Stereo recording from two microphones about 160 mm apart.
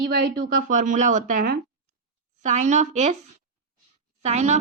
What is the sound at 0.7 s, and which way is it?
Speech, 55° right (ahead or behind).